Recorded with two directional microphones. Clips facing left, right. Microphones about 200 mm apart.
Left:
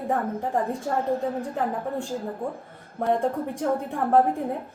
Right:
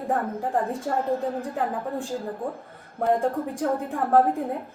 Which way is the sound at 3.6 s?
Centre (ahead or behind).